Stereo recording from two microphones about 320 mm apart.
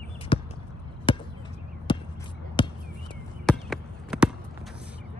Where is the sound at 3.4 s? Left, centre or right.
Centre.